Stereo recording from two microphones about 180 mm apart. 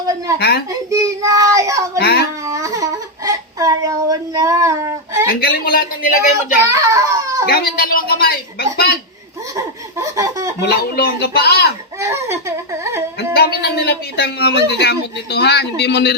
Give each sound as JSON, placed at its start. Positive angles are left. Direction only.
{"t": 0.3, "sound": "speech", "side_deg": 65}
{"t": 0.9, "sound": "child singing", "side_deg": -15}
{"t": 2.0, "sound": "dog", "side_deg": 65}
{"t": 2.4, "sound": "a sound", "side_deg": -15}
{"t": 5.3, "sound": "speech", "side_deg": 55}
{"t": 6.7, "sound": "a child's voice", "side_deg": -15}
{"t": 7.5, "sound": "a sound", "side_deg": 50}
{"t": 9.6, "sound": "laughter", "side_deg": -20}
{"t": 10.6, "sound": "speech", "side_deg": 65}
{"t": 11.9, "sound": "speech", "side_deg": -15}
{"t": 13.1, "sound": "speech", "side_deg": 65}